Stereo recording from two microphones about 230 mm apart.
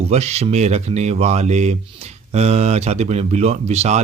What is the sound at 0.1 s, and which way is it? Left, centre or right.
Speech, right.